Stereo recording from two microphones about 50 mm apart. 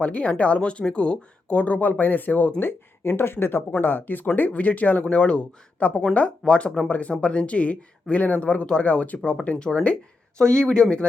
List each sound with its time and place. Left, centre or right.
0.0 s speech: left
2.6 s speech: left; by 11.0 s centre